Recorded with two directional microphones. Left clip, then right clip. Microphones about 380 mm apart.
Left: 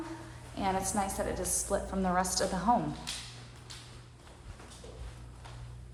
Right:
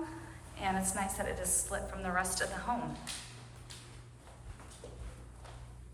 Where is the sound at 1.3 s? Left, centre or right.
Centre.